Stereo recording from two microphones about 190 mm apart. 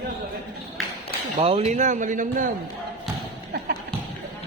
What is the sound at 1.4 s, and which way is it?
A man's voice, 30° right (ahead or behind).